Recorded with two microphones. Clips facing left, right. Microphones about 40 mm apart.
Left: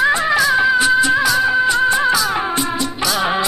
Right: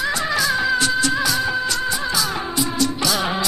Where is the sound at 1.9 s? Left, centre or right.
Left.